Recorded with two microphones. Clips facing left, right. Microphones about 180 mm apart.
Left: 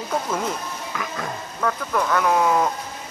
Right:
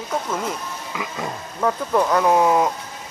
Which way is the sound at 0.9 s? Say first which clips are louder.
Right 2 dB; 20° right (ahead or behind).